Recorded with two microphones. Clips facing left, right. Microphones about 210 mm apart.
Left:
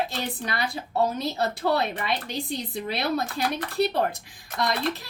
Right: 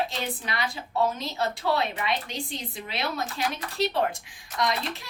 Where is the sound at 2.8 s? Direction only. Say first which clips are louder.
Left 4 dB; 40° left (ahead or behind).